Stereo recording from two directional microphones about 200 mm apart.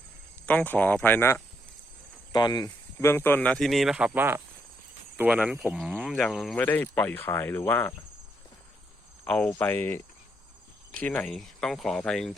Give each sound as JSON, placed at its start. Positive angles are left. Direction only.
{"t": 0.4, "sound": "speech", "side_deg": 10}
{"t": 9.2, "sound": "speech", "side_deg": 5}